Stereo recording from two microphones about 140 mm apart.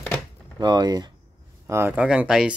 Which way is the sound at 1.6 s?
20° right (ahead or behind).